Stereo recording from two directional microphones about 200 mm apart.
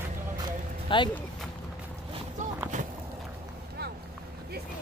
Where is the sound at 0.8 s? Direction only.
25° left (ahead or behind).